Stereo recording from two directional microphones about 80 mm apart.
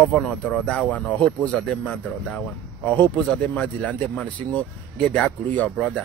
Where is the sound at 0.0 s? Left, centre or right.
Centre.